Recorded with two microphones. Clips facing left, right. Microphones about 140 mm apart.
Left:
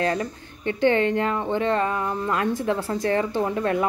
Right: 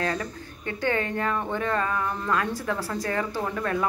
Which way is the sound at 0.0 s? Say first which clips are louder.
Left 4 dB; 30° left (ahead or behind).